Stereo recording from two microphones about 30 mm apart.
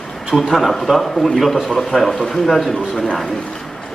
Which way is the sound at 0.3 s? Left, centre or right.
Centre.